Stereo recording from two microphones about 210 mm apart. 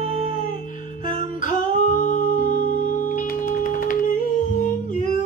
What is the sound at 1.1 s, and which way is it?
Music, 40° left (ahead or behind).